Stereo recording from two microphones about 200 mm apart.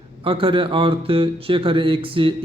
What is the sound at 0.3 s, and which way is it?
A man's voice, 25° right (ahead or behind).